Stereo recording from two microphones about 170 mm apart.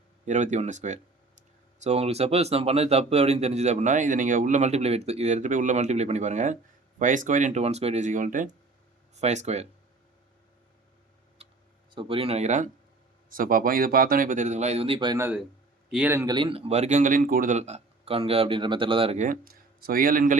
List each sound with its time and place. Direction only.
0.3 s speech: 45° right (ahead or behind)
11.9 s speech: 30° right (ahead or behind)
15.9 s a man's voice: 10° right (ahead or behind)
16.2 s speech: 25° right (ahead or behind)
19.2 s speech: 55° right (ahead or behind)